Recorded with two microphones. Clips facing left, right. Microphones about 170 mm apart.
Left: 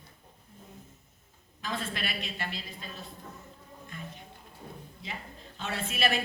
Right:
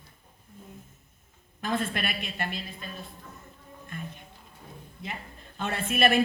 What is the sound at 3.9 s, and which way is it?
Music, 55° right (ahead or behind).